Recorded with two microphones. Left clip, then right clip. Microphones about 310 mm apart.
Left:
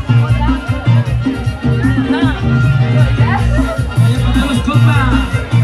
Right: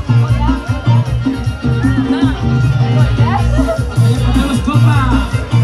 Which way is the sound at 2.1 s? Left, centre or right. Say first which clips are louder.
Left 1 dB; centre.